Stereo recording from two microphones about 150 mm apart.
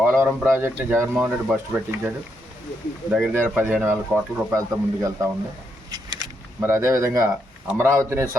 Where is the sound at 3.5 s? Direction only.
5° right (ahead or behind).